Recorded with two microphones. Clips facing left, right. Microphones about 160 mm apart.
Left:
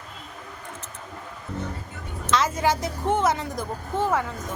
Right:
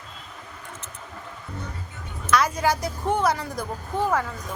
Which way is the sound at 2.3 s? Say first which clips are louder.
Right 1 dB; 25° left (ahead or behind).